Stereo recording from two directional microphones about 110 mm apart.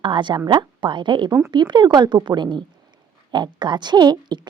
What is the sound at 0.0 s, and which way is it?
A woman's voice, 45° right (ahead or behind).